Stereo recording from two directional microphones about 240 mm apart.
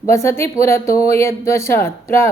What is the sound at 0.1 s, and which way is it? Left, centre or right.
Speech, centre.